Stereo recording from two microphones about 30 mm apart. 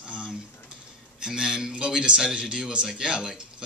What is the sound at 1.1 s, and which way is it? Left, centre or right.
Speech, right.